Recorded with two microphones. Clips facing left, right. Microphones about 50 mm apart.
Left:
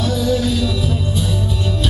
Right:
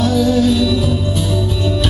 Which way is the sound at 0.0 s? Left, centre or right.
Right.